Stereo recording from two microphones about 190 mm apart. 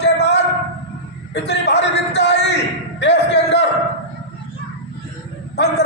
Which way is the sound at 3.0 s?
65° left (ahead or behind).